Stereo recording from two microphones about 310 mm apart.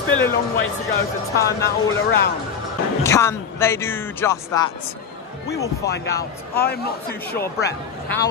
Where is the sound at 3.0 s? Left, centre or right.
Centre.